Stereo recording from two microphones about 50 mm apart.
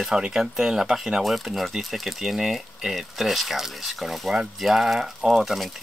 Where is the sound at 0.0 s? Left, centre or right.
Centre.